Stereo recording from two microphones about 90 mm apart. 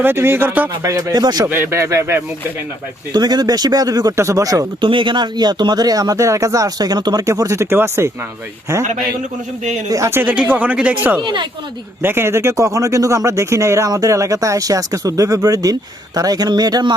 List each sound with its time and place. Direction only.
0.0 s speech: 25° right (ahead or behind)
0.8 s speech: 40° right (ahead or behind)
1.5 s speech: 25° right (ahead or behind)
3.1 s speech: 50° right (ahead or behind)
4.8 s speech: 65° right (ahead or behind); by 7.3 s 50° right (ahead or behind)
7.3 s speech: 35° right (ahead or behind)
9.9 s speech: 30° right (ahead or behind)
11.2 s speech: 60° right (ahead or behind)
12.0 s speech: 25° right (ahead or behind); by 16.9 s 50° right (ahead or behind)